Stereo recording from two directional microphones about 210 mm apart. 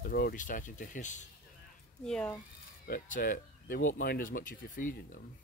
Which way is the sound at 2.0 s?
5° left (ahead or behind).